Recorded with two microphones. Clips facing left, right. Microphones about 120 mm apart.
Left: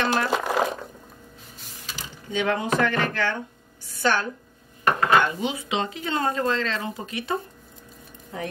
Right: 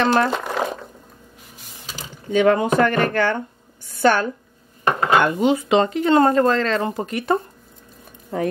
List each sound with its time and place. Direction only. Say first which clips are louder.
0.0 s speech: right 6 dB; 40° right (ahead or behind)
0.3 s boiling: even; 5° left (ahead or behind)
2.0 s a sound: right 9 dB; 50° right (ahead or behind)
3.0 s a woman's voice: right 6 dB; 50° right (ahead or behind)
4.8 s dishes: right 2 dB; 25° right (ahead or behind)
5.2 s speech: right 8 dB; 50° right (ahead or behind)